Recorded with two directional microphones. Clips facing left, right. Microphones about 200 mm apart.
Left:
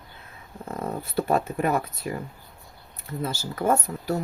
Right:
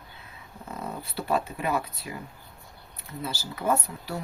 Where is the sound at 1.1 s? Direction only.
50° left (ahead or behind).